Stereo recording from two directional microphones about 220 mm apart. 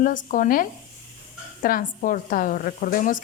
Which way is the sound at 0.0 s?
35° left (ahead or behind).